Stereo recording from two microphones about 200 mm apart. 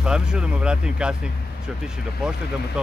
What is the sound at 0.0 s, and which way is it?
Speech, 5° right (ahead or behind).